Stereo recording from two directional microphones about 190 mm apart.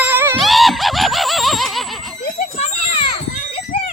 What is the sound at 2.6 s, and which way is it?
Children playing, 35° left (ahead or behind).